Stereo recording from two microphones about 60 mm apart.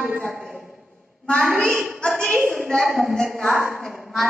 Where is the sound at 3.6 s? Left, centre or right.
Right.